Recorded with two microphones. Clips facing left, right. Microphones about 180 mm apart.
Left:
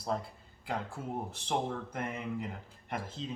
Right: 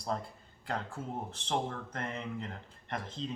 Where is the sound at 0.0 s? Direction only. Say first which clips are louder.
Left 1 dB; 5° left (ahead or behind).